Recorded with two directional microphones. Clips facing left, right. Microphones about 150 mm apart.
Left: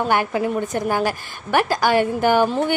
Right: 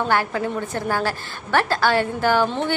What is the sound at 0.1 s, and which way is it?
A woman's voice, 15° left (ahead or behind).